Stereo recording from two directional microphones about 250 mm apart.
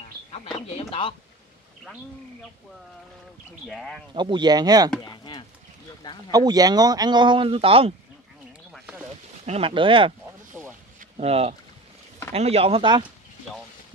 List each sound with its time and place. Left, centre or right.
0.3 s speech: left
3.6 s speech: centre
4.1 s speech: centre
5.0 s speech: centre
6.3 s speech: centre
8.7 s a sound: centre
9.5 s speech: right
10.6 s speech: centre
11.0 s a sound: right
12.3 s speech: right